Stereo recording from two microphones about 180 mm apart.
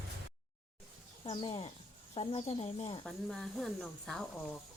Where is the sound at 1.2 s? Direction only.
25° left (ahead or behind).